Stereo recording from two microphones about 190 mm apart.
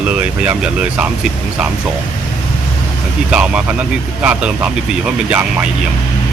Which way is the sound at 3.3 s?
5° right (ahead or behind).